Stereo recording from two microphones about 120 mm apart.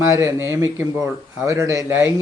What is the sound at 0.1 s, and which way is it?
A man's voice, 25° right (ahead or behind).